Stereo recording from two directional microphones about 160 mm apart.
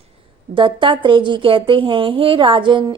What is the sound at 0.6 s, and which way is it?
A woman's voice, 30° right (ahead or behind).